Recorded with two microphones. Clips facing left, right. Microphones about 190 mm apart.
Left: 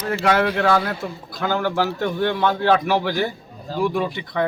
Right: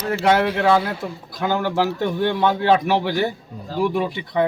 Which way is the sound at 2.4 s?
20° right (ahead or behind).